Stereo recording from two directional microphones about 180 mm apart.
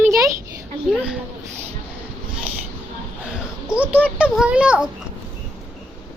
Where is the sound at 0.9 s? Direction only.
5° right (ahead or behind).